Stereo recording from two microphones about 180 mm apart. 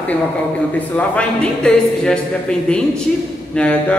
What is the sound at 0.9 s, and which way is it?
A man's voice, 5° left (ahead or behind).